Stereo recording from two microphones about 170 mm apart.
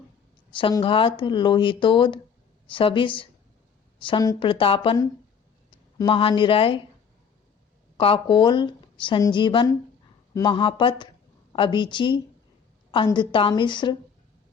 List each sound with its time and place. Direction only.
0.5 s a woman's voice: 30° left (ahead or behind)
6.0 s speech: 30° left (ahead or behind)
7.9 s a woman's voice: 30° left (ahead or behind)